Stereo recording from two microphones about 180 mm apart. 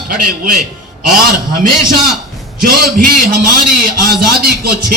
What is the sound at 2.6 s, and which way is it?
Speech, 55° right (ahead or behind).